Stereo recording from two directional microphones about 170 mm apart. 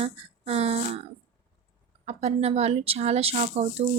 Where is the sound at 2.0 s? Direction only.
40° right (ahead or behind).